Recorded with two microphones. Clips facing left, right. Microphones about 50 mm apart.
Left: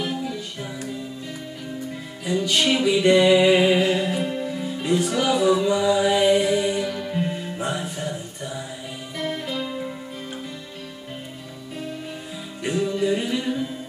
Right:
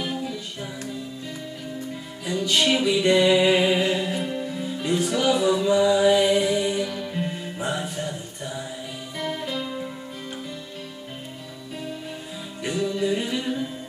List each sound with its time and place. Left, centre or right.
0.0 s music: centre
2.2 s music: centre
12.6 s music: centre